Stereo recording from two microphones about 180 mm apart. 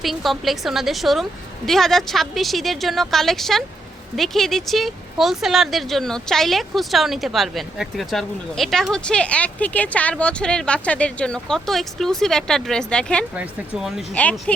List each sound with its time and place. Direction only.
0.0 s speech: centre (ahead or behind)
13.3 s speech: 5° right (ahead or behind)